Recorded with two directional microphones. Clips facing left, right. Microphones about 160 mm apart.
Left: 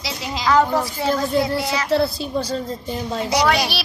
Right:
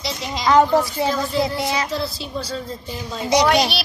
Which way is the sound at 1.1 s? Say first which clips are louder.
Left 2 dB; 55° left (ahead or behind).